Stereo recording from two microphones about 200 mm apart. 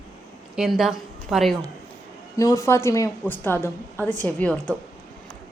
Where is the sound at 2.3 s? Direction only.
15° left (ahead or behind).